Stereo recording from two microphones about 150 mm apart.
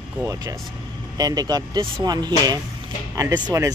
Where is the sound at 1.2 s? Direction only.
25° right (ahead or behind).